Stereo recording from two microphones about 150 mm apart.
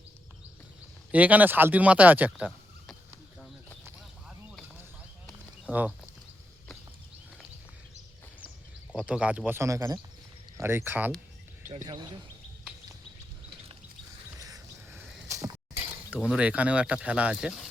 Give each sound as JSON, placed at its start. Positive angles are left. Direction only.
{"t": 1.1, "sound": "speech", "side_deg": -10}
{"t": 5.7, "sound": "speech", "side_deg": -10}
{"t": 9.0, "sound": "speech", "side_deg": -5}
{"t": 11.9, "sound": "speech", "side_deg": -30}
{"t": 14.3, "sound": "a sound", "side_deg": -25}
{"t": 16.3, "sound": "speech", "side_deg": -10}